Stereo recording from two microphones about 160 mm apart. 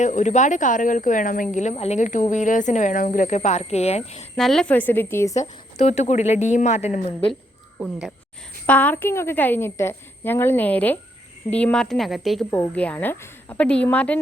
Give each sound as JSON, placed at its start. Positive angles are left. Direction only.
{"t": 0.0, "sound": "a woman's voice", "side_deg": 50}
{"t": 1.5, "sound": "a woman's voice", "side_deg": 45}
{"t": 4.4, "sound": "a woman's voice", "side_deg": 0}
{"t": 5.4, "sound": "a woman's voice", "side_deg": 45}
{"t": 7.8, "sound": "a woman's voice", "side_deg": 0}
{"t": 8.6, "sound": "a woman's voice", "side_deg": 10}
{"t": 12.5, "sound": "a woman's voice", "side_deg": 10}